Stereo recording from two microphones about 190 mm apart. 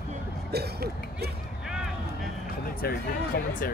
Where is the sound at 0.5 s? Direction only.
55° right (ahead or behind).